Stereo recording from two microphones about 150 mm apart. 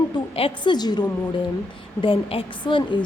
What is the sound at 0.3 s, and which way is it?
A woman's voice, 35° left (ahead or behind).